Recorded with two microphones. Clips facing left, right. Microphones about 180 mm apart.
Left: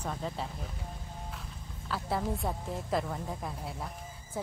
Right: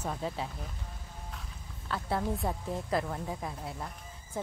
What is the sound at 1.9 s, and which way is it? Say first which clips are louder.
Speech: right 1 dB; centre (ahead or behind).